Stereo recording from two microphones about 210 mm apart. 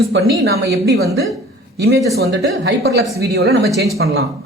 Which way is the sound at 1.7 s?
50° right (ahead or behind).